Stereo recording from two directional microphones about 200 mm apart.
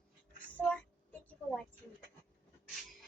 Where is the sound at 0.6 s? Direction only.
5° left (ahead or behind).